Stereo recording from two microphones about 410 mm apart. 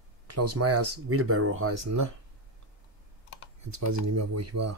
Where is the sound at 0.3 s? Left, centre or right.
Right.